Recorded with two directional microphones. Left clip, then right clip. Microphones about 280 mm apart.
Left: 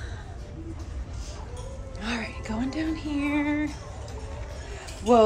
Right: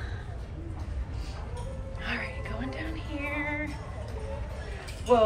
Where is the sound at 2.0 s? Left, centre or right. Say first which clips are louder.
Left 2 dB; centre.